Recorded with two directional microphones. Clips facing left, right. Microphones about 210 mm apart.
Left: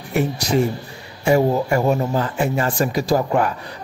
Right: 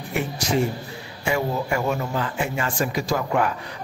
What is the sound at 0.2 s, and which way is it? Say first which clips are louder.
Speech: left 4 dB; 40° left (ahead or behind).